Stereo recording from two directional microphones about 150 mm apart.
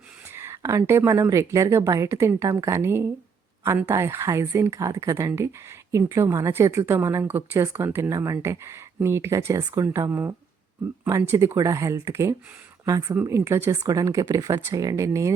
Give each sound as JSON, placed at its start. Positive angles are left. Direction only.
{"t": 0.3, "sound": "speech", "side_deg": -15}